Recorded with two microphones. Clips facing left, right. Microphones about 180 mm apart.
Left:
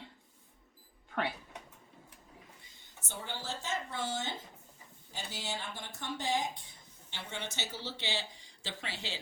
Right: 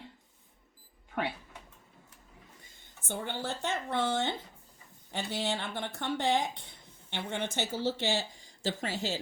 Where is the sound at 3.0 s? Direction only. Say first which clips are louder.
Right 6 dB; 55° right (ahead or behind).